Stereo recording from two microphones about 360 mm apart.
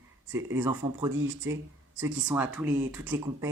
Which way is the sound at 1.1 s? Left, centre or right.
Right.